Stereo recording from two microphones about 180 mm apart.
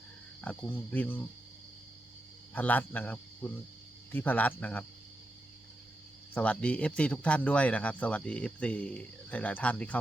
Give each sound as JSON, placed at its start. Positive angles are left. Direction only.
{"t": 0.4, "sound": "a man's voice", "side_deg": 10}
{"t": 2.5, "sound": "a man's voice", "side_deg": 10}
{"t": 6.3, "sound": "a man's voice", "side_deg": 5}